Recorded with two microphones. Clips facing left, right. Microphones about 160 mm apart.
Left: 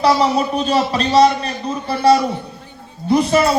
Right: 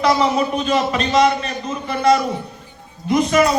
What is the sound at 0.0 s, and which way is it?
A man's voice, 35° left (ahead or behind).